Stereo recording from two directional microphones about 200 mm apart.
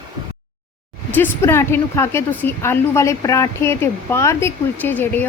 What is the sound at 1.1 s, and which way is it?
A woman's voice, 10° left (ahead or behind).